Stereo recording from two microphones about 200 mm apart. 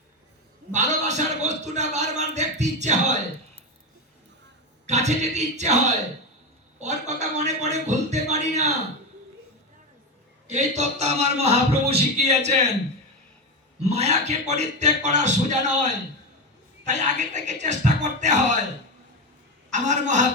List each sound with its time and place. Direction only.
0.7 s a man's voice: 35° right (ahead or behind)
4.9 s a man's voice: 35° right (ahead or behind)
10.4 s a man's voice: 35° right (ahead or behind)
13.8 s a man's voice: 30° right (ahead or behind)
19.7 s a man's voice: 40° right (ahead or behind)